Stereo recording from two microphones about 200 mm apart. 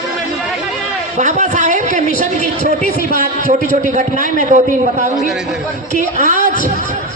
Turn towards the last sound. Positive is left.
turn(degrees=-40)  # may be behind; listen again after turning